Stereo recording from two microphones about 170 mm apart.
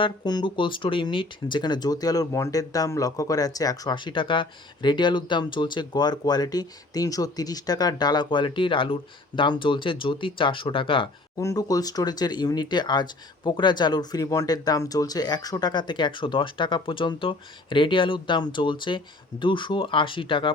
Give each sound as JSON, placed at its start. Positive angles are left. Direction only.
{"t": 0.0, "sound": "speech", "side_deg": 25}
{"t": 11.3, "sound": "speech", "side_deg": 20}